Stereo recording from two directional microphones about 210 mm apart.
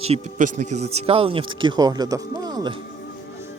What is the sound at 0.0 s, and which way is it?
Speech, 35° right (ahead or behind).